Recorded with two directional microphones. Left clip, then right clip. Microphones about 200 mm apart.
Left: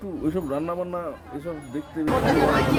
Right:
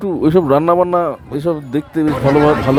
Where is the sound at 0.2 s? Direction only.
45° right (ahead or behind).